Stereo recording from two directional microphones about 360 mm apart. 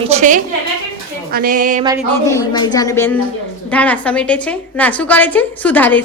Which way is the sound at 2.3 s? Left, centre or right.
Centre.